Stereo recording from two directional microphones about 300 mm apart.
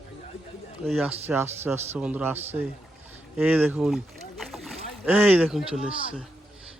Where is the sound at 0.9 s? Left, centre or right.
Centre.